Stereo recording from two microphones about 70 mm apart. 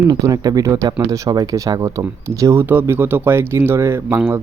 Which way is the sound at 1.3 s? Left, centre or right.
Right.